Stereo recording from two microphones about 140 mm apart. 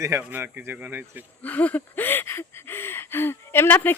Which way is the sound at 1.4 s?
10° left (ahead or behind).